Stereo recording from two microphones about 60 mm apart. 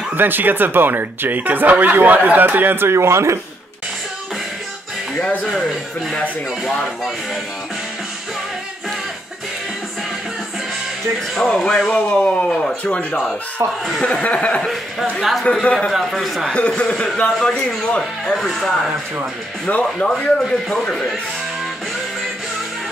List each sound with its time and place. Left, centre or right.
0.1 s speech: right
5.2 s speech: centre
11.4 s speech: centre
14.2 s speech: left
15.1 s a man's voice: centre
15.6 s speech: centre
15.9 s a man's voice: centre
16.5 s speech: centre
18.3 s a man's voice: centre
19.7 s speech: left